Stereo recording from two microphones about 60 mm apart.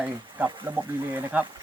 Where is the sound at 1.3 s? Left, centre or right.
Right.